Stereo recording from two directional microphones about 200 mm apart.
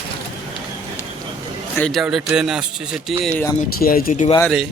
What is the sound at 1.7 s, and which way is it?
Speech, 5° left (ahead or behind).